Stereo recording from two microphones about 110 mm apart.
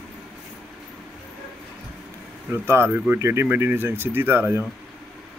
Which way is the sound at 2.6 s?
25° right (ahead or behind).